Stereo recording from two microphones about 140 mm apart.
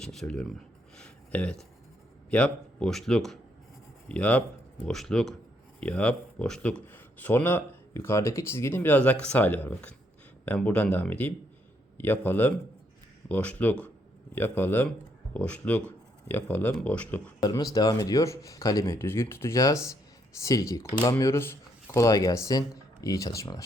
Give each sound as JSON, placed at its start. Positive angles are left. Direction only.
{"t": 0.0, "sound": "speech", "side_deg": 5}
{"t": 0.9, "sound": "a sound", "side_deg": 10}
{"t": 2.3, "sound": "speech", "side_deg": 5}
{"t": 17.4, "sound": "speech", "side_deg": 25}